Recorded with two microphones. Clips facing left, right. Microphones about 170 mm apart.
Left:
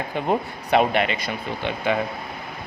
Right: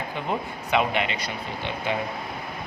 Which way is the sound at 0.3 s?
45° left (ahead or behind).